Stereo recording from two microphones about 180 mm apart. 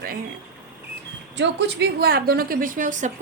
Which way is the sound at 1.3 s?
80° right.